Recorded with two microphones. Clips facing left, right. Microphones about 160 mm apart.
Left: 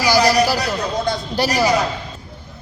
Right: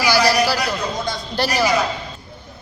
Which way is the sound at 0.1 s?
15° left (ahead or behind).